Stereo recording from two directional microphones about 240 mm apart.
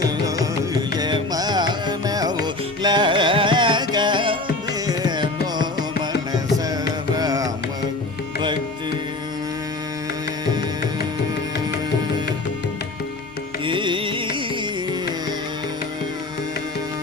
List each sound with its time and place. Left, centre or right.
0.9 s music: centre
4.9 s carnatic music: centre
7.2 s carnatic music: centre
13.7 s music: right